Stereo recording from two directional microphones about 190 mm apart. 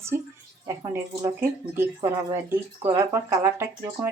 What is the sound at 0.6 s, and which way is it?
Speech, 15° right (ahead or behind).